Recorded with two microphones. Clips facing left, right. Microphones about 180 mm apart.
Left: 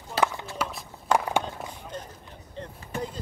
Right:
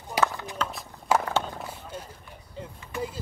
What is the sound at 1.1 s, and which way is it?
Skateboard, 5° right (ahead or behind).